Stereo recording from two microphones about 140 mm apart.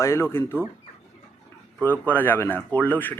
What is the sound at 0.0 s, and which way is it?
Speech, 20° left (ahead or behind).